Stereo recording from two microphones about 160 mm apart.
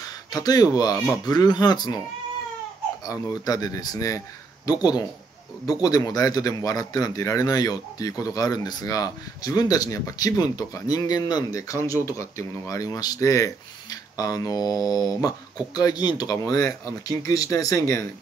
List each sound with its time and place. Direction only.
0.0 s speech: 25° left (ahead or behind)
3.1 s speech: 20° left (ahead or behind)